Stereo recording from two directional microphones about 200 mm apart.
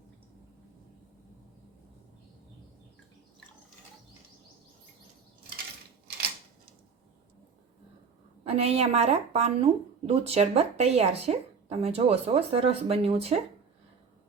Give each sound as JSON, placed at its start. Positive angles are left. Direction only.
{"t": 8.4, "sound": "speech", "side_deg": -30}